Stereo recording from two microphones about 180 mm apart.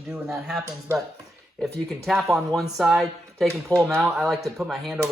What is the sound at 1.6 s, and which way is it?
Speech, centre (ahead or behind).